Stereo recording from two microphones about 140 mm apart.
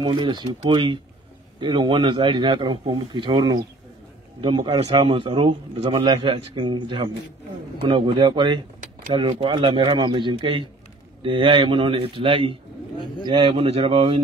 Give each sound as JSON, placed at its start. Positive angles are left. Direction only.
{"t": 0.0, "sound": "a man's voice", "side_deg": -35}